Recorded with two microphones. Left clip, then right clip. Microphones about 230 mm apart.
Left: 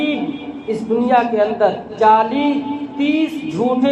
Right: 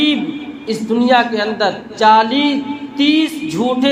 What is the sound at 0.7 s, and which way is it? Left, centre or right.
A man's voice, right.